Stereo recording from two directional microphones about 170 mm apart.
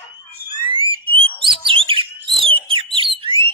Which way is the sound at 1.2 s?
30° right (ahead or behind).